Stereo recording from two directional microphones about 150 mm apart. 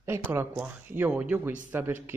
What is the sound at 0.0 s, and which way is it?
Speech, 15° right (ahead or behind).